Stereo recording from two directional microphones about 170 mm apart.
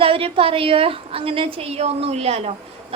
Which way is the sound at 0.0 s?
35° right (ahead or behind).